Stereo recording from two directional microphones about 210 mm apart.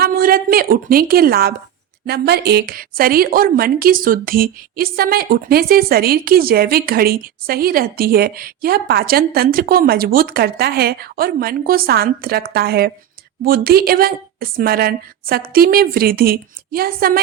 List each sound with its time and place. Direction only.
0.0 s a woman's voice: 45° right (ahead or behind)